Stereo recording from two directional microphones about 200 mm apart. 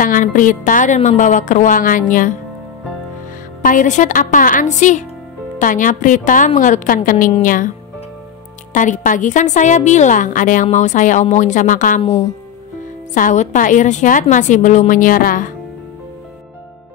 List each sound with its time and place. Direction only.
0.0 s a woman's voice: 40° left (ahead or behind)
3.6 s a woman's voice: 40° left (ahead or behind)
8.7 s a woman's voice: 40° left (ahead or behind)
13.1 s a woman's voice: 40° left (ahead or behind)